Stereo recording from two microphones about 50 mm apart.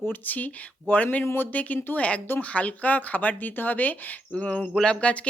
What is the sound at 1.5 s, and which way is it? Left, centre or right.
Speech, left.